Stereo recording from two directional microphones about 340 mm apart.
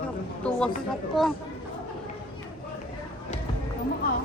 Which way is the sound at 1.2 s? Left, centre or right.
Centre.